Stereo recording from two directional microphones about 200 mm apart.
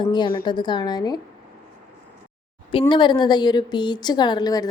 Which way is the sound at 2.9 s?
25° left (ahead or behind).